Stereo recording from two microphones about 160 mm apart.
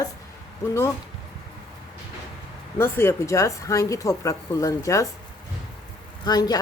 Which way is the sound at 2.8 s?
15° left (ahead or behind).